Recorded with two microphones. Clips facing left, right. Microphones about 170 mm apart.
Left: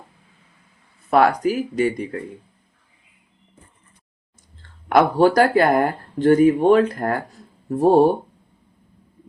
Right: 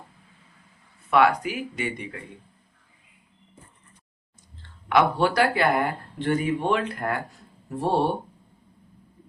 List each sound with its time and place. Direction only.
1.1 s speech: 40° left (ahead or behind)
4.6 s speech: 45° left (ahead or behind)